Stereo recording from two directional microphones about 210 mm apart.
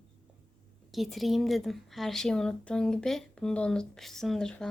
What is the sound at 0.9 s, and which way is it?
A woman's voice, centre (ahead or behind).